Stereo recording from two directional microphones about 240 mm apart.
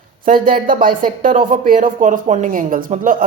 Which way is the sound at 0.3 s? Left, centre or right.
Right.